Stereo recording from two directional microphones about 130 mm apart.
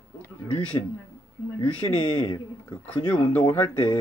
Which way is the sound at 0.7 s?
30° left (ahead or behind).